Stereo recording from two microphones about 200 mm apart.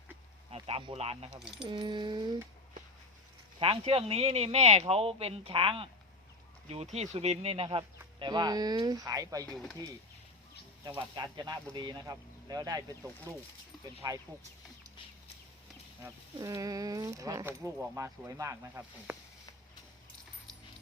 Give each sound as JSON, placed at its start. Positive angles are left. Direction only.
{"t": 0.5, "sound": "speech", "side_deg": -25}
{"t": 1.4, "sound": "speech", "side_deg": 0}
{"t": 1.6, "sound": "speech", "side_deg": -20}
{"t": 3.6, "sound": "speech", "side_deg": -30}
{"t": 6.9, "sound": "speech", "side_deg": -35}
{"t": 9.5, "sound": "speech", "side_deg": 0}
{"t": 11.1, "sound": "speech", "side_deg": -20}
{"t": 16.0, "sound": "speech", "side_deg": -15}